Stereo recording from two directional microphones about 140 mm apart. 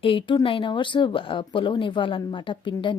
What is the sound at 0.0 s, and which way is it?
A woman's voice, 40° left (ahead or behind).